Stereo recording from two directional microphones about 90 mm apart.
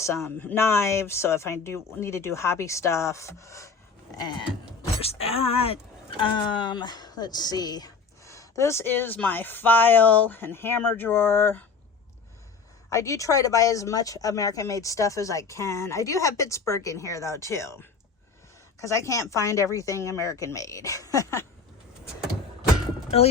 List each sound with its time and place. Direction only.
0.0 s speech: 30° left (ahead or behind)
0.3 s speech: 20° left (ahead or behind)
4.9 s speech: 90° left; by 7.9 s 50° left (ahead or behind)
8.2 s speech: 35° left (ahead or behind)
12.9 s speech: 35° left (ahead or behind)